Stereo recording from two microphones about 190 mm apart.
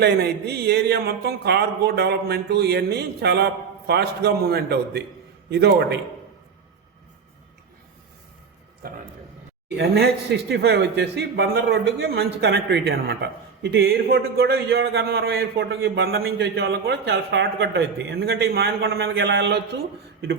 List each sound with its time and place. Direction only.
0.0 s a man's voice: 60° right (ahead or behind)
8.8 s a sound: 50° right (ahead or behind)
9.7 s a man's voice: 60° right (ahead or behind)